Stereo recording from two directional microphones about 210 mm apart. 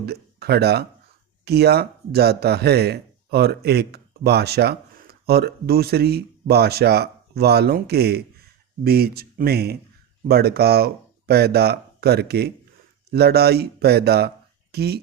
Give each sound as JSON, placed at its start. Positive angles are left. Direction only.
{"t": 0.0, "sound": "speech", "side_deg": -50}